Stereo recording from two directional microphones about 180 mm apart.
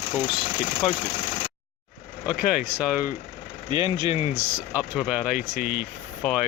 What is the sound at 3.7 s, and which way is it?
Speech, 25° right (ahead or behind).